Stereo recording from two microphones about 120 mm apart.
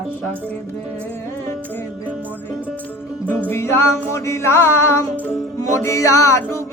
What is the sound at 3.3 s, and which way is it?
Music, 15° left (ahead or behind).